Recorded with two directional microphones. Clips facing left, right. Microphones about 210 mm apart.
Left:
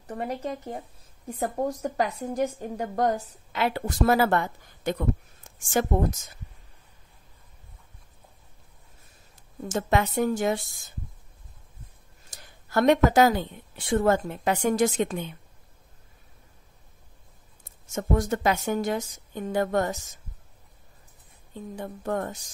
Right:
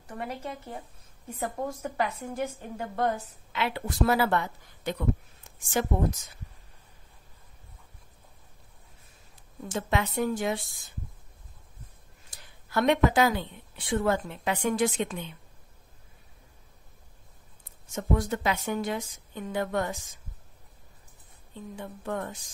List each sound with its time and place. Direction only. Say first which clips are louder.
0.0 s a woman's voice: left 5 dB; 35° left (ahead or behind)
9.3 s speech: left 4 dB; 45° left (ahead or behind)
12.3 s a woman's voice: left 3 dB; 45° left (ahead or behind)
17.6 s a woman's voice: left 1 dB; 45° left (ahead or behind)
21.7 s speech: left 4 dB; 40° left (ahead or behind)